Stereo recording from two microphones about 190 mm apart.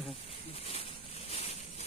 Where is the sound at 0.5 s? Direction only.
35° left (ahead or behind).